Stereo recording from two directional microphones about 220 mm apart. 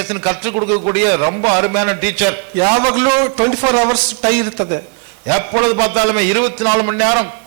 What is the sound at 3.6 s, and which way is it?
A man's voice, 25° right (ahead or behind).